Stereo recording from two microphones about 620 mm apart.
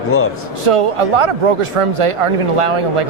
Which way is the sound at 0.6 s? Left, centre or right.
Right.